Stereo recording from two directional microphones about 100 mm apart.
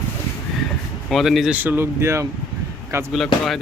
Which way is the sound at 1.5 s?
20° right (ahead or behind).